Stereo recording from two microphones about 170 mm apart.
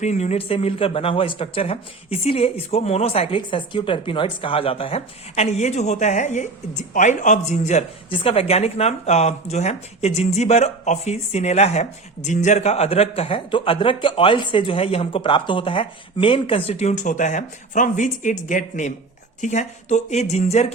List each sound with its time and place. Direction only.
0.0 s speech: 40° left (ahead or behind)